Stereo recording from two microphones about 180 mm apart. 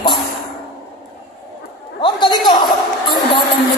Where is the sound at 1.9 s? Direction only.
25° left (ahead or behind).